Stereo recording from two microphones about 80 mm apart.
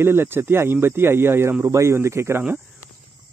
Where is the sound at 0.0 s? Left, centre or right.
Right.